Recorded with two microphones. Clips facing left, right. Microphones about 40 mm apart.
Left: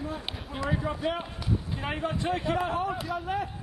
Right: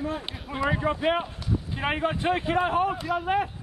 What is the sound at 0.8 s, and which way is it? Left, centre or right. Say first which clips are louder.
A man's voice: right 6 dB; right.